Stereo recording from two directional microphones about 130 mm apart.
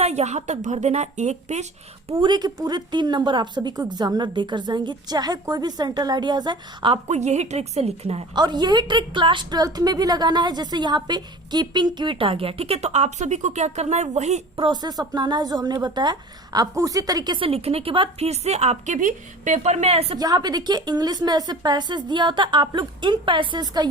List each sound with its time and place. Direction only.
0.0 s a woman's voice: 60° right (ahead or behind)
2.1 s a woman's voice: 35° right (ahead or behind)
7.1 s a woman's voice: 60° right (ahead or behind)
8.4 s a woman's voice: 35° right (ahead or behind); by 14.4 s 60° right (ahead or behind)
14.5 s a woman's voice: 35° right (ahead or behind); by 20.1 s 50° right (ahead or behind)
20.1 s a woman's voice: 30° right (ahead or behind)